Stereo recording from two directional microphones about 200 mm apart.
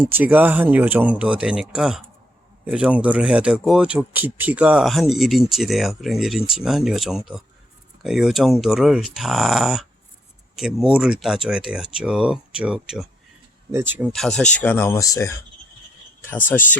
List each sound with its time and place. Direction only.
0.0 s speech: 10° right (ahead or behind)
14.1 s speech: centre (ahead or behind)